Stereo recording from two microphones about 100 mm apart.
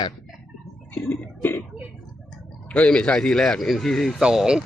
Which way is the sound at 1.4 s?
20° left (ahead or behind).